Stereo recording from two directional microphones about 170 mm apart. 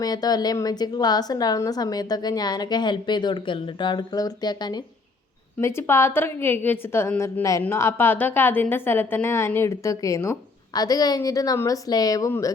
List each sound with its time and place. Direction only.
0.0 s a woman's voice: 20° left (ahead or behind)